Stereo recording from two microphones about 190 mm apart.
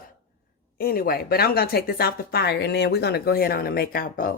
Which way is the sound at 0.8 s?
50° left (ahead or behind).